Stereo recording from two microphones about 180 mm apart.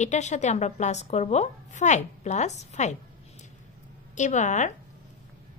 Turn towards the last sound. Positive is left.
turn(degrees=40)  # may be behind; listen again after turning